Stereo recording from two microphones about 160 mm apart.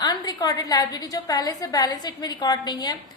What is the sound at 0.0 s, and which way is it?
A woman's voice, 25° left (ahead or behind).